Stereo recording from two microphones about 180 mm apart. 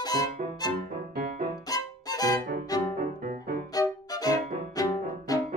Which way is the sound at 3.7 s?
20° left (ahead or behind).